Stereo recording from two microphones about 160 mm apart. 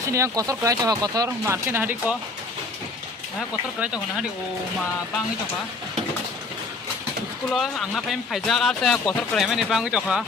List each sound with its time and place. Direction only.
0.1 s speech: 20° right (ahead or behind)
3.8 s speech: 5° right (ahead or behind)
7.5 s speech: centre (ahead or behind)